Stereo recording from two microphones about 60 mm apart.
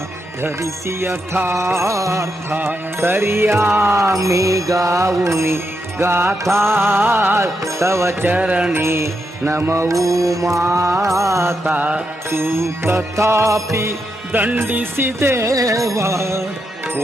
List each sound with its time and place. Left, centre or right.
0.6 s music: right
2.5 s music: right
6.0 s music: right
8.2 s music: right
8.7 s music: right
9.6 s mantra: right
10.7 s music: right
11.0 s mantra: right
11.6 s music: right
12.3 s music: right
14.3 s music: right
15.5 s mantra: right